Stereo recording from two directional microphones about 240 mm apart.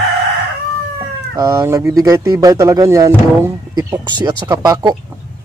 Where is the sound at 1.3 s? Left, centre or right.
Centre.